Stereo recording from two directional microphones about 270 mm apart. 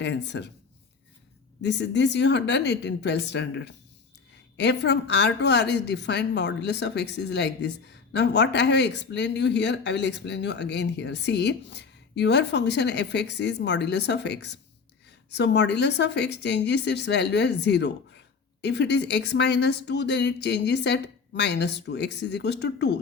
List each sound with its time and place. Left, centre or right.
0.0 s speech: left
1.6 s speech: left